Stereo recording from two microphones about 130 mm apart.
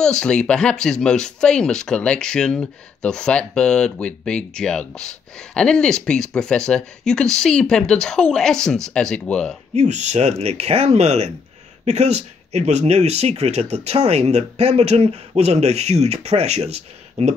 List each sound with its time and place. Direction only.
0.0 s speech: 5° left (ahead or behind)
9.8 s speech: 60° right (ahead or behind)